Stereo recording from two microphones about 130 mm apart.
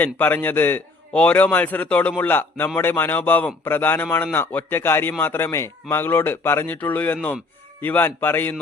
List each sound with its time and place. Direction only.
0.0 s a man's voice: 15° left (ahead or behind)